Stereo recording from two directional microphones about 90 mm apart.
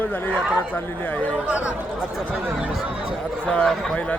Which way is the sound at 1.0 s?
20° left (ahead or behind).